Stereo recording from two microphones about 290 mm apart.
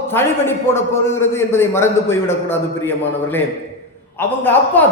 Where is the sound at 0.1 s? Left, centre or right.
Centre.